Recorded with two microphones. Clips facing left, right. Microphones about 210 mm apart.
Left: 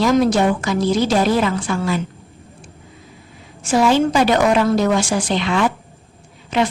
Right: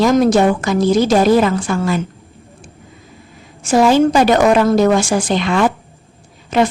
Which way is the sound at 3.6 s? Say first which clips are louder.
Right 4 dB; 45° right (ahead or behind).